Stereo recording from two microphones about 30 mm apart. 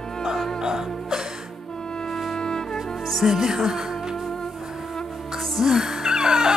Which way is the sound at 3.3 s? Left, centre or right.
Centre.